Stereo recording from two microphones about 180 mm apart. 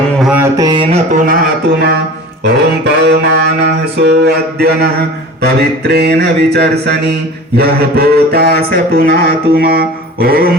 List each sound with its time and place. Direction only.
0.2 s mantra: 5° right (ahead or behind)
0.4 s mantra: 20° right (ahead or behind)
1.1 s music: 55° right (ahead or behind)
2.4 s mantra: 65° right (ahead or behind)